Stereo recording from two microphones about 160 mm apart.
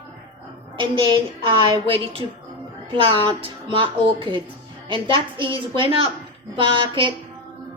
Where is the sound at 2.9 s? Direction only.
30° right (ahead or behind).